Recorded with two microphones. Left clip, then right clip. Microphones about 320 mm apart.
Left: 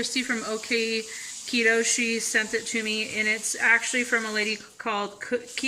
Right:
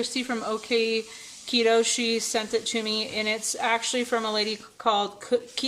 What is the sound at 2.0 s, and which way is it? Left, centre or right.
Speech, right.